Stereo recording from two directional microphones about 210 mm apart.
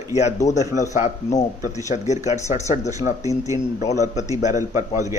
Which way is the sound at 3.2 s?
15° right (ahead or behind).